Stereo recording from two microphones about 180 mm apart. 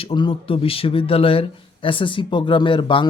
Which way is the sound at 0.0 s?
30° left (ahead or behind).